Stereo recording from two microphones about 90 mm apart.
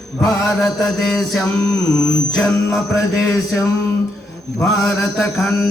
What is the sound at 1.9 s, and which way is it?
Mantra, 5° left (ahead or behind).